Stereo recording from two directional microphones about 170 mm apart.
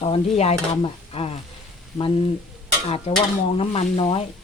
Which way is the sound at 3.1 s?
35° left (ahead or behind).